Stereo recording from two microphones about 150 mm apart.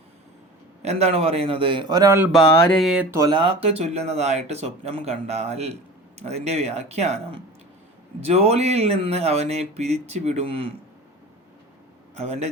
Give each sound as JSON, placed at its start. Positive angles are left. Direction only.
{"t": 0.8, "sound": "a man's voice", "side_deg": -45}
{"t": 2.3, "sound": "a sound", "side_deg": 0}
{"t": 3.2, "sound": "speech", "side_deg": -30}
{"t": 12.1, "sound": "speech", "side_deg": -45}